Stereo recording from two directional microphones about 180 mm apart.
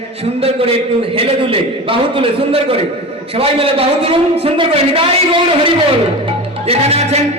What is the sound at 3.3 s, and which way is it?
A man's voice, 30° right (ahead or behind).